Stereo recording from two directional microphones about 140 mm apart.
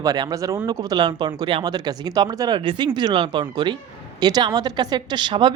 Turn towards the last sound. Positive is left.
turn(degrees=-35)  # may be behind; listen again after turning